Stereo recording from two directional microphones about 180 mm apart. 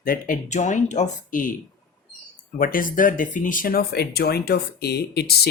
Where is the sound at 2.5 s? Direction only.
50° left (ahead or behind).